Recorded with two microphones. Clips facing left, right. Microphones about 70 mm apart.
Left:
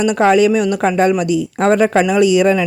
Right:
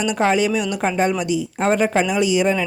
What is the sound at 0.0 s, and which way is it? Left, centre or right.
Speech, left.